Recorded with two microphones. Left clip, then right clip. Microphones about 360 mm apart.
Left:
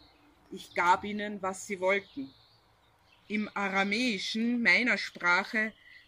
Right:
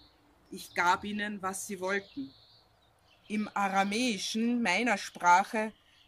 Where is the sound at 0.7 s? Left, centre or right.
Centre.